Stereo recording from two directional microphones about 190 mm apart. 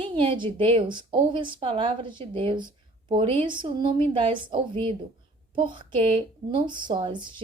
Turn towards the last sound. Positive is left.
turn(degrees=-25)  # may be behind; listen again after turning